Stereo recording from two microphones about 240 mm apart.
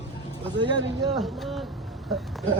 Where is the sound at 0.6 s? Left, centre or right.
Centre.